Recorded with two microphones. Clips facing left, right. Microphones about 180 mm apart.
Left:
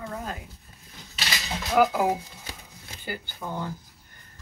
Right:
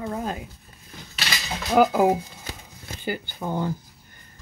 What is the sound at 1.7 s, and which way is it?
Speech, 25° right (ahead or behind).